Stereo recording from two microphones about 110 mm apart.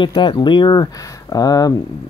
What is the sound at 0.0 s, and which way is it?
Speech, 45° left (ahead or behind).